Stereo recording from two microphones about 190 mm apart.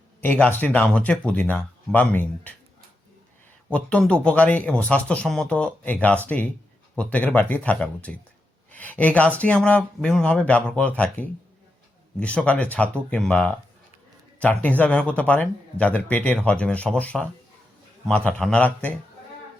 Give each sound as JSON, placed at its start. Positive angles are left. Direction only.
{"t": 0.2, "sound": "speech", "side_deg": 10}
{"t": 3.7, "sound": "speech", "side_deg": 5}